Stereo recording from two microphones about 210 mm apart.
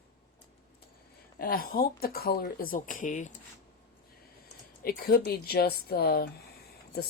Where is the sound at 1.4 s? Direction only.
45° left (ahead or behind).